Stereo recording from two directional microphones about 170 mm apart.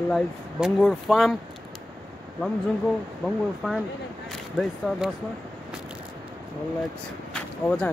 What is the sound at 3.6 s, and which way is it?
Speech, centre (ahead or behind).